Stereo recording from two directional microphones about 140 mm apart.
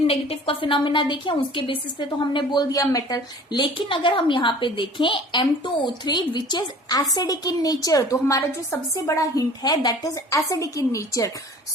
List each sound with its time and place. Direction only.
0.1 s a woman's voice: 40° left (ahead or behind); by 11.3 s 25° left (ahead or behind)